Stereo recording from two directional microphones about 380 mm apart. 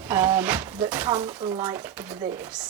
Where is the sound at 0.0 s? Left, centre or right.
Centre.